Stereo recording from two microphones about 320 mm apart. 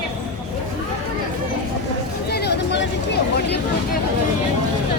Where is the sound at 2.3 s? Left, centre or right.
Left.